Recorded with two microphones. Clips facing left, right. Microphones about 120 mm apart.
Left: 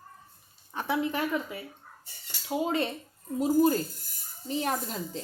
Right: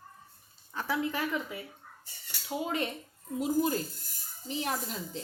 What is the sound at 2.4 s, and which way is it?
Speech, 30° left (ahead or behind).